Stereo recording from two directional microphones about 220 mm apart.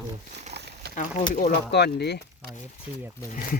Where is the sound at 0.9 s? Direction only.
35° left (ahead or behind).